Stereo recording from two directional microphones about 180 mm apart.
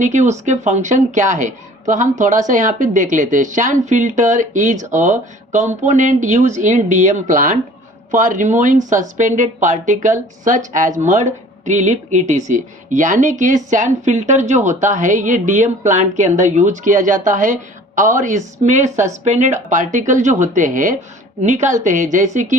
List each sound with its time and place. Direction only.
0.0 s a woman's voice: 40° right (ahead or behind)